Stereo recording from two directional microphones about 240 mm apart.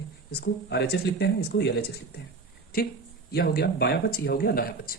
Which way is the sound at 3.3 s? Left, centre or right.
Left.